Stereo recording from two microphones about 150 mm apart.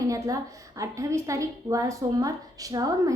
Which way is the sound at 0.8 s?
20° right (ahead or behind).